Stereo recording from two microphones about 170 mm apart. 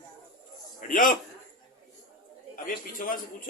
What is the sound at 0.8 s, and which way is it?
Speech, 50° left (ahead or behind).